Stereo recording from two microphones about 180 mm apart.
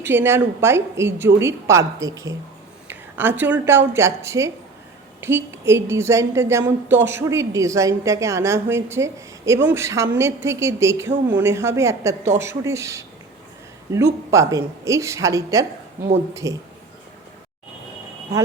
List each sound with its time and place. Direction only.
0.0 s speech: 10° right (ahead or behind)